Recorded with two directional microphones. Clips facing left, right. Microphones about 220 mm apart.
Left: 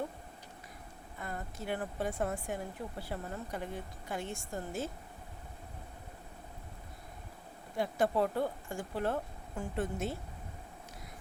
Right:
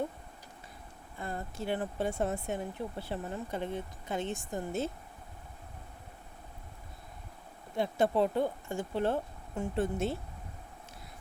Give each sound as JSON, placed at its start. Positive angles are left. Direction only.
{"t": 1.2, "sound": "speech", "side_deg": -30}
{"t": 7.8, "sound": "speech", "side_deg": -25}